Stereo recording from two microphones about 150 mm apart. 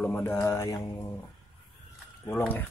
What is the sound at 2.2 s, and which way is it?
Speech, 15° left (ahead or behind).